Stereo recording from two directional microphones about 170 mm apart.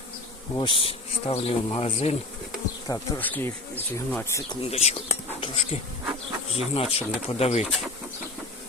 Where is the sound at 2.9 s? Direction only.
10° left (ahead or behind).